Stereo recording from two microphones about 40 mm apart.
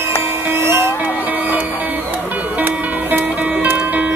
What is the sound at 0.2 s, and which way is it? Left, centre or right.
Music, right.